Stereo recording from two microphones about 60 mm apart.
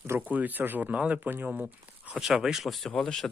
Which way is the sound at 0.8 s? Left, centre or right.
Centre.